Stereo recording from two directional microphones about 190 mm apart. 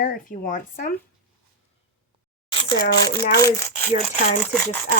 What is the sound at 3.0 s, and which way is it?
Speech, 20° left (ahead or behind).